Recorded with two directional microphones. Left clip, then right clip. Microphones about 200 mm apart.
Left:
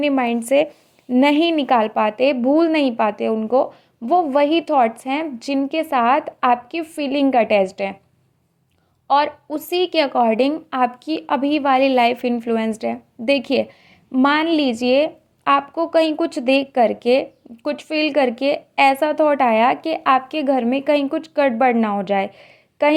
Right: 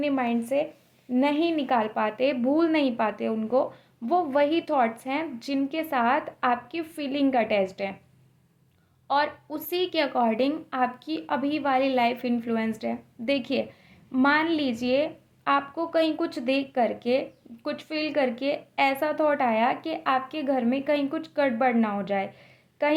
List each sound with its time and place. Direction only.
0.0 s a woman's voice: 35° left (ahead or behind)
9.0 s a woman's voice: 30° left (ahead or behind)